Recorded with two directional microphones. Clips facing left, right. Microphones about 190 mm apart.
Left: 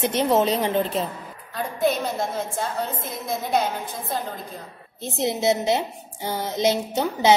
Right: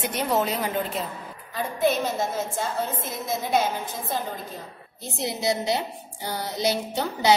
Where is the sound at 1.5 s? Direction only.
5° right (ahead or behind).